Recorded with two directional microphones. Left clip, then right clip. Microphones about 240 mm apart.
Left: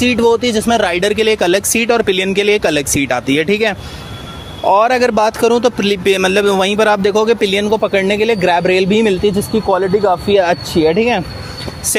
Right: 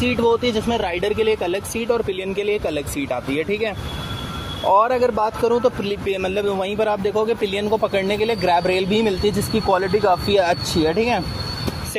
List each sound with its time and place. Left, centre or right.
0.0 s speech: left
9.6 s speech: left